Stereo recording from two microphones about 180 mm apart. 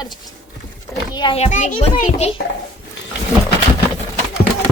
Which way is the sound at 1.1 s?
30° left (ahead or behind).